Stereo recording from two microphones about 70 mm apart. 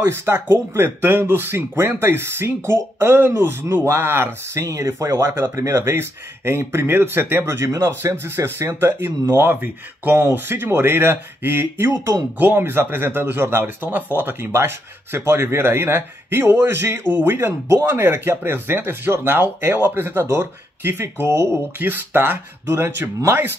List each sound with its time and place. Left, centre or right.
0.0 s speech: right
4.6 s speech: right
5.1 s speech: right
12.4 s speech: right